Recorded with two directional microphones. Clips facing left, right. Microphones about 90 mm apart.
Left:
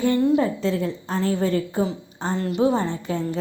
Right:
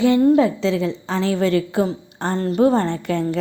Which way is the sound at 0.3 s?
90° right.